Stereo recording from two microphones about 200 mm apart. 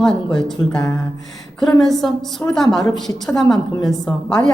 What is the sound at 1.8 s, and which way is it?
A woman's voice, centre (ahead or behind).